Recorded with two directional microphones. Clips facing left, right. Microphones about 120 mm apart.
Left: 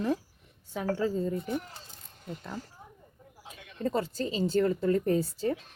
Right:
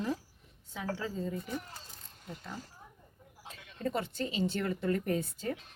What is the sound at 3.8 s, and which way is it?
Speech, 35° left (ahead or behind).